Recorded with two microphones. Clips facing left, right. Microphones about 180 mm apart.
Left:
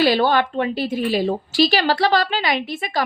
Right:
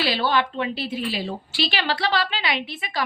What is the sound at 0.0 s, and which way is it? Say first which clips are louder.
Speech: left 6 dB; 45° left (ahead or behind).